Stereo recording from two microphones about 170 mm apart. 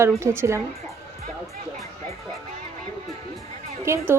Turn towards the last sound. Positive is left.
turn(degrees=-15)  # may be behind; listen again after turning